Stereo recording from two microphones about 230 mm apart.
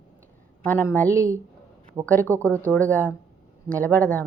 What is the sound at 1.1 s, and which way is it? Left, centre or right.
Speech, centre.